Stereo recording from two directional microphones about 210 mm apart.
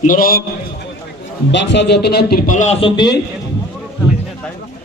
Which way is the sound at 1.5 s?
60° left (ahead or behind).